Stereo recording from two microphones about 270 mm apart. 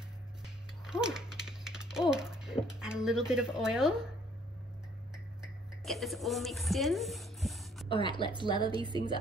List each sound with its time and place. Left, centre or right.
0.8 s a sound: centre
5.9 s speech: centre
7.9 s a woman's voice: centre